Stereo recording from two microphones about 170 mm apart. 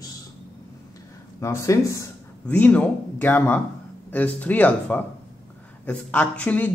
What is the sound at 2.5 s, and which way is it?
Speech, 10° left (ahead or behind).